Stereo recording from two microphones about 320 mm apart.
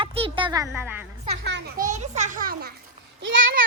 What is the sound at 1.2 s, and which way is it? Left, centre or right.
A child's voice, right.